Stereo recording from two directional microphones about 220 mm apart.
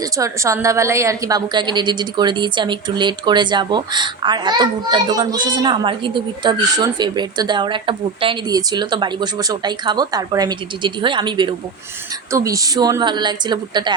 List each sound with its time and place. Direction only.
0.0 s a woman's voice: 15° right (ahead or behind)